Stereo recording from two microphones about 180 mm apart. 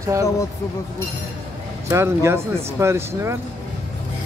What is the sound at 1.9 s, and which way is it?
Speech, 15° right (ahead or behind).